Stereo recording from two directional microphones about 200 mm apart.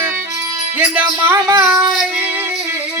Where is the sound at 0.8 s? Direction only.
10° right (ahead or behind).